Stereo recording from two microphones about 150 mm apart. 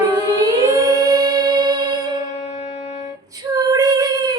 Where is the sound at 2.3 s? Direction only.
45° left (ahead or behind).